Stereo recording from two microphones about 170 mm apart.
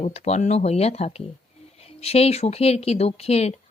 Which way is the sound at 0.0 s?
40° left (ahead or behind).